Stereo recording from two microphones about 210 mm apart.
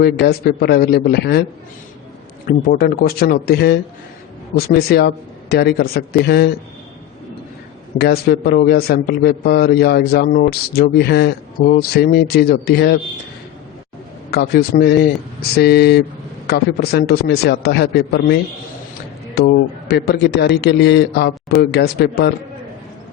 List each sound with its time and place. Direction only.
0.0 s a man's voice: 50° left (ahead or behind)
2.5 s a man's voice: 50° left (ahead or behind)
7.9 s a man's voice: 50° left (ahead or behind)
14.3 s a man's voice: 50° left (ahead or behind)
19.4 s a man's voice: 50° left (ahead or behind)